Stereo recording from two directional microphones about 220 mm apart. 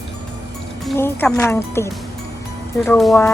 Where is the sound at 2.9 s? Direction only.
5° left (ahead or behind).